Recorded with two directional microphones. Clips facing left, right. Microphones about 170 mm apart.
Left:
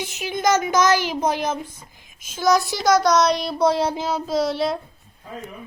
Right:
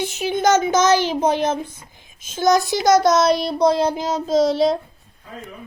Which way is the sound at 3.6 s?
15° right (ahead or behind).